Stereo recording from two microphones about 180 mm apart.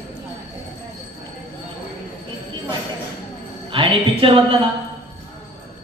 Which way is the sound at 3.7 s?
30° right (ahead or behind).